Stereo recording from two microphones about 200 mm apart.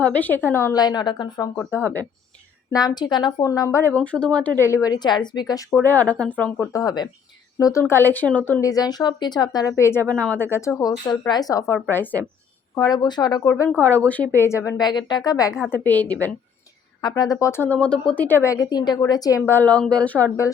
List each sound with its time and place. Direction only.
0.0 s speech: 5° left (ahead or behind)
5.7 s speech: 10° left (ahead or behind)
6.8 s a woman's voice: 20° left (ahead or behind)
17.0 s speech: 20° left (ahead or behind)